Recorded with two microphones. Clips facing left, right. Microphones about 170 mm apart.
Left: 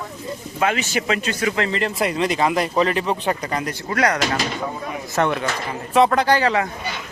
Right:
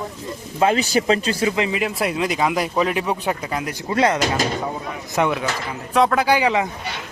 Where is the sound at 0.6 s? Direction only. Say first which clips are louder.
Right 4 dB; 35° right (ahead or behind).